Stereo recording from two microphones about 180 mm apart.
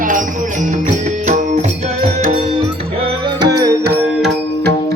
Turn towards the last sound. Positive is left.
turn(degrees=-15)  # may be behind; listen again after turning